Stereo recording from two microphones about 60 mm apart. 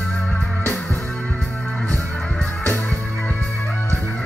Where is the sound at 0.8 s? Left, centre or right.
Centre.